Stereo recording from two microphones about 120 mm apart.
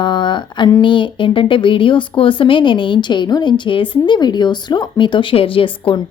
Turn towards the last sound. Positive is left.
turn(degrees=45)  # may be behind; listen again after turning